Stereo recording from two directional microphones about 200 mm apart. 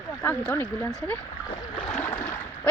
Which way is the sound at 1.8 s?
30° left (ahead or behind).